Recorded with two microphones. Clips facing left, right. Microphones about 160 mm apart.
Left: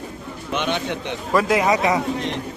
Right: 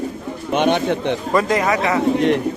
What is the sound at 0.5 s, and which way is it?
Speech, 50° right (ahead or behind).